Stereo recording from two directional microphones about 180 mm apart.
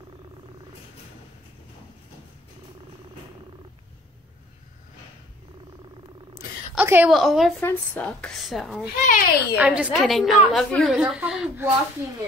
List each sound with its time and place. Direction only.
6.7 s a woman's voice: 10° right (ahead or behind)
9.0 s a child's voice: 50° left (ahead or behind)
9.6 s a woman's voice: 5° right (ahead or behind)
11.0 s a woman's voice: 5° right (ahead or behind)